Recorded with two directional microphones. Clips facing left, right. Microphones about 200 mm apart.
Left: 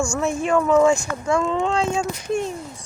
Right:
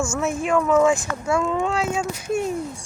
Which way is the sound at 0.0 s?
5° right (ahead or behind).